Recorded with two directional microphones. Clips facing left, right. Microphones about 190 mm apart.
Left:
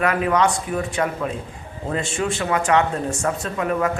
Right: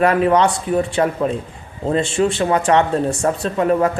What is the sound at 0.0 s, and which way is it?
Speech, 30° right (ahead or behind).